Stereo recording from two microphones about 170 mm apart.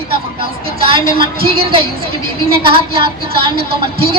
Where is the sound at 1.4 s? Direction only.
35° right (ahead or behind).